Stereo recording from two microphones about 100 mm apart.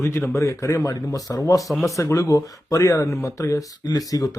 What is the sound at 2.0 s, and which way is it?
Speech, 35° left (ahead or behind).